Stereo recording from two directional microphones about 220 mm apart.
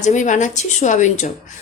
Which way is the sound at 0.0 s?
35° left (ahead or behind).